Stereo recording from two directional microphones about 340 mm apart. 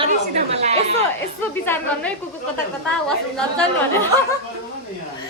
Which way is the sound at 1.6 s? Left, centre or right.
Centre.